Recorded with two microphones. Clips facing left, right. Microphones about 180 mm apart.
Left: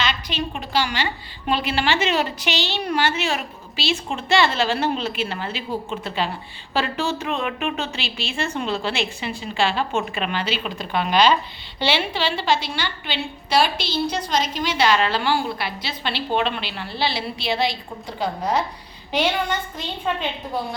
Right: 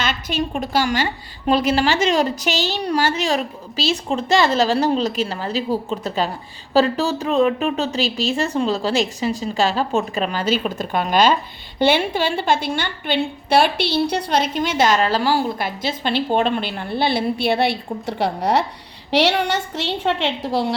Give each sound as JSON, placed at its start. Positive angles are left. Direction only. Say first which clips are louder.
{"t": 0.0, "sound": "a woman's voice", "louder": "right 3 dB", "side_deg": -45}